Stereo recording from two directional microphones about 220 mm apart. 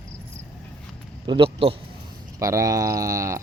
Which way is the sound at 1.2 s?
25° right (ahead or behind).